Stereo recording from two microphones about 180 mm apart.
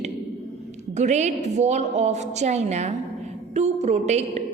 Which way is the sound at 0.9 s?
40° right (ahead or behind).